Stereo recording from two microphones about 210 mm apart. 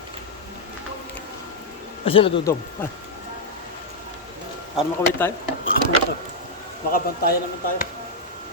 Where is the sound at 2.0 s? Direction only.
25° left (ahead or behind).